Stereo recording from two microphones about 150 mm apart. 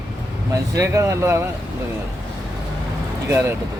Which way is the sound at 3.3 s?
15° right (ahead or behind).